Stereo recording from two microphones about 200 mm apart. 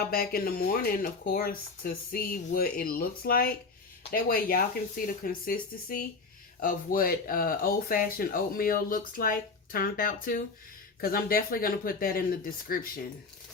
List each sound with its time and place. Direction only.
0.1 s speech: 50° left (ahead or behind)